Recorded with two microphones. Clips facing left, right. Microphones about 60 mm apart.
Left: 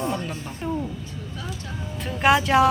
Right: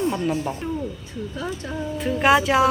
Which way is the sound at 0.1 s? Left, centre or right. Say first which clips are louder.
Right 6 dB; centre.